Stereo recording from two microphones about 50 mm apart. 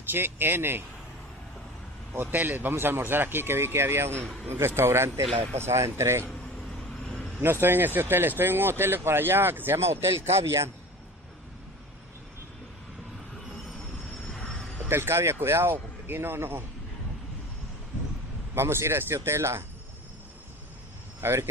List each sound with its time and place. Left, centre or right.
0.0 s speech: right
2.3 s speech: right
7.6 s speech: right
14.9 s speech: right
18.5 s speech: right
21.2 s speech: right